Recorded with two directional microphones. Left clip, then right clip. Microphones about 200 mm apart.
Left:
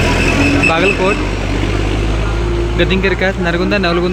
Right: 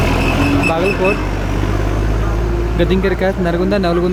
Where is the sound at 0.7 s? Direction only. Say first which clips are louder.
Left 2 dB; 10° right (ahead or behind).